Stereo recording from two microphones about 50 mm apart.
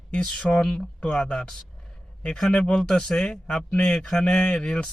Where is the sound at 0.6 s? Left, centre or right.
Centre.